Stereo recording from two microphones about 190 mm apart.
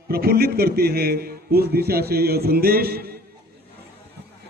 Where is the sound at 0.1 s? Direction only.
55° right (ahead or behind).